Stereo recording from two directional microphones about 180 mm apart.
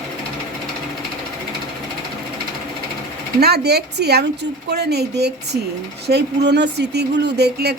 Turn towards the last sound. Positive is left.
turn(degrees=-65)  # may be behind; listen again after turning